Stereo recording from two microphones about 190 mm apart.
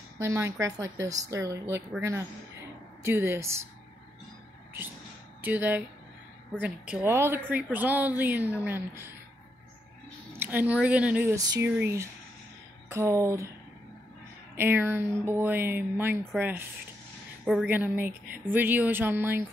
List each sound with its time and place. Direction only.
0.2 s speech: 15° right (ahead or behind)
5.4 s speech: 10° right (ahead or behind)
10.4 s speech: 10° right (ahead or behind)
14.6 s speech: 10° right (ahead or behind)